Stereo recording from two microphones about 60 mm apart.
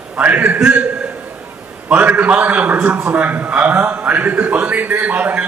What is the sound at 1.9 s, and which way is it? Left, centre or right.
A man's voice, right.